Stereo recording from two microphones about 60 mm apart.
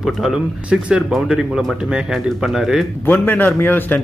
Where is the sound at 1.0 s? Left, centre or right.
Centre.